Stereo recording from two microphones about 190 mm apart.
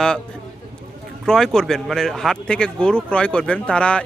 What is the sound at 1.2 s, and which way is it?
Speech, centre (ahead or behind).